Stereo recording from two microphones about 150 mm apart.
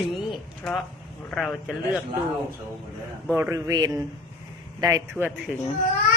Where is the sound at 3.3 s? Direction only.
20° right (ahead or behind).